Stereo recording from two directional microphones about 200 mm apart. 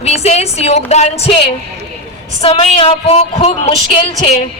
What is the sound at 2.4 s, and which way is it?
Speech, 30° left (ahead or behind).